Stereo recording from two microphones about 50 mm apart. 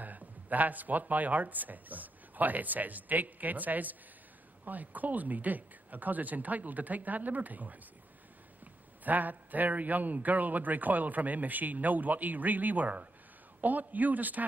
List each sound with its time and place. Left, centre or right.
0.0 s a man's voice: right
9.0 s a man's voice: right